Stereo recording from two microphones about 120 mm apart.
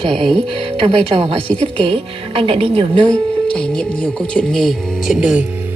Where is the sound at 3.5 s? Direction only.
10° left (ahead or behind).